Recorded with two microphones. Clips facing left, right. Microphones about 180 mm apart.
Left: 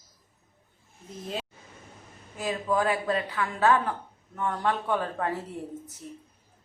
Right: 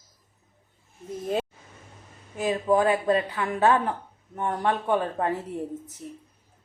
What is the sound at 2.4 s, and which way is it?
Speech, 20° right (ahead or behind).